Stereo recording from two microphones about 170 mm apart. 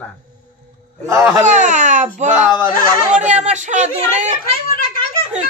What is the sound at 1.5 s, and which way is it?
A woman's voice, 45° right (ahead or behind).